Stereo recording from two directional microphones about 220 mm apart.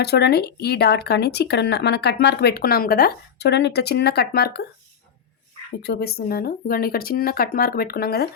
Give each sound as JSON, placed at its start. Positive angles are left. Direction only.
{"t": 0.0, "sound": "speech", "side_deg": 50}
{"t": 5.8, "sound": "speech", "side_deg": 45}